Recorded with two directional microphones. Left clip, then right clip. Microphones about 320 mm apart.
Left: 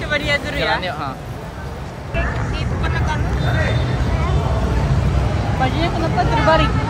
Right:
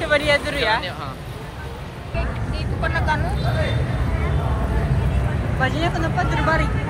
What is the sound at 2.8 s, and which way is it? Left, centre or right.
Vehicle, right.